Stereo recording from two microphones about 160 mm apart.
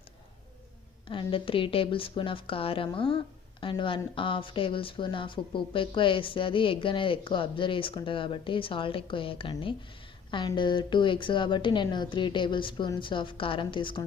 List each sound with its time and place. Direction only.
1.0 s a woman's voice: 35° left (ahead or behind)